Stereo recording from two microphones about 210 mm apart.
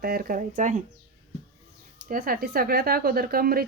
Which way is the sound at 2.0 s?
45° right (ahead or behind).